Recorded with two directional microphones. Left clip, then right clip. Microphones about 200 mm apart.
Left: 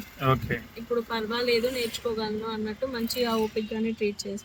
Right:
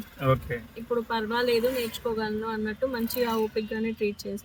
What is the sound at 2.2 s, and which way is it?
Speech, 30° right (ahead or behind).